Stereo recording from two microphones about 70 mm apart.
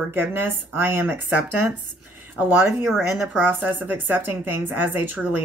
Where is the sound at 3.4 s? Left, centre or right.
Right.